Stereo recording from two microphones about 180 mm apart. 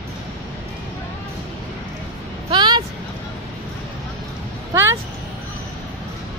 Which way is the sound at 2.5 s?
25° right (ahead or behind).